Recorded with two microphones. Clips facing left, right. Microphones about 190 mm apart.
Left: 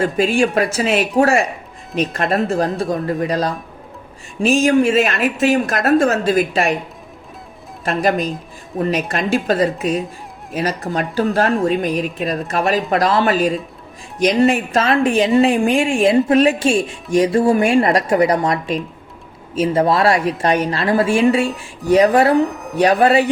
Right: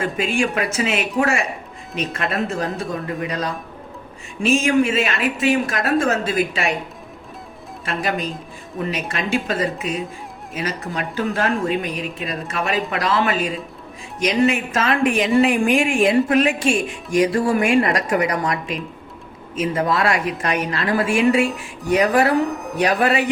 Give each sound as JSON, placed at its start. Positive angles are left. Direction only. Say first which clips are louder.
{"t": 0.0, "sound": "speech", "louder": "left 5 dB", "side_deg": 35}
{"t": 7.9, "sound": "a woman's voice", "louder": "left 6 dB", "side_deg": 40}
{"t": 22.4, "sound": "a woman's voice", "louder": "even", "side_deg": 0}
{"t": 22.8, "sound": "speech", "louder": "left 5 dB", "side_deg": 30}